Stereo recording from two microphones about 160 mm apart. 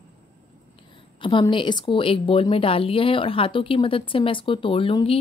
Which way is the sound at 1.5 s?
30° left (ahead or behind).